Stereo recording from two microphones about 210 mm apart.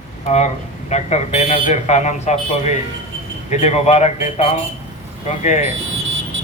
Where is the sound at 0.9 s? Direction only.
30° left (ahead or behind).